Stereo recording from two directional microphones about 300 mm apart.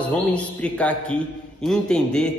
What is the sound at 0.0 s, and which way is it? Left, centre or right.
A man's voice, centre.